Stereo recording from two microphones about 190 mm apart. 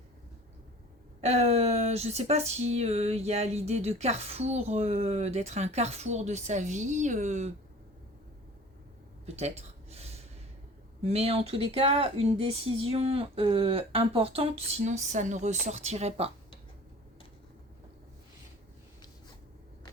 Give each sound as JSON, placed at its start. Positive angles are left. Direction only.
{"t": 1.2, "sound": "speech", "side_deg": -35}
{"t": 9.2, "sound": "a sound", "side_deg": -35}
{"t": 11.0, "sound": "speech", "side_deg": -35}